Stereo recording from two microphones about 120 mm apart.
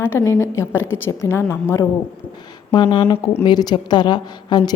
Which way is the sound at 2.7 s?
40° left (ahead or behind).